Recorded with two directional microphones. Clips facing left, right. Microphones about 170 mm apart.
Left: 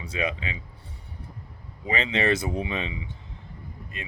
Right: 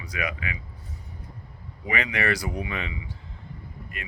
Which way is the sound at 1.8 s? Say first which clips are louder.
Left 2 dB; 25° left (ahead or behind).